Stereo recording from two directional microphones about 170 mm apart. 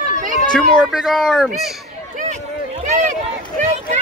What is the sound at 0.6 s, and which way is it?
Speech, centre (ahead or behind).